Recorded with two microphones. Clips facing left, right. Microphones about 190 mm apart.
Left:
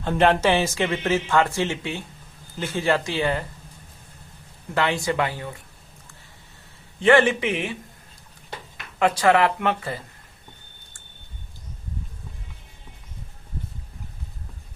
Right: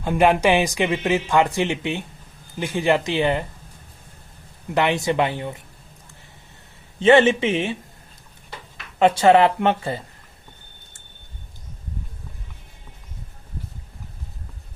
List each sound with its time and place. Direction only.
0.0 s speech: 10° right (ahead or behind)
4.7 s speech: 20° right (ahead or behind)
7.0 s speech: 20° right (ahead or behind)
9.0 s speech: 25° right (ahead or behind)